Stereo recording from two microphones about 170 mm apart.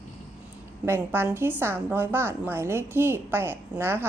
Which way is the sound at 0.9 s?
15° right (ahead or behind).